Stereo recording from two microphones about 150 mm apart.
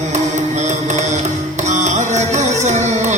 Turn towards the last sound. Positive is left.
turn(degrees=-50)  # may be behind; listen again after turning